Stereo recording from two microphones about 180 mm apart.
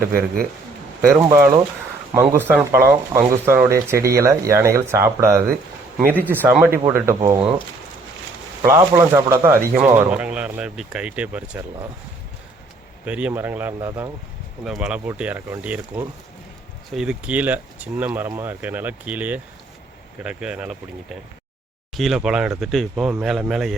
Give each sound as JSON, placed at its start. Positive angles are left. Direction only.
{"t": 1.0, "sound": "speech", "side_deg": -15}
{"t": 8.6, "sound": "speech", "side_deg": -15}
{"t": 13.1, "sound": "speech", "side_deg": -5}
{"t": 14.6, "sound": "speech", "side_deg": -5}
{"t": 21.9, "sound": "speech", "side_deg": 0}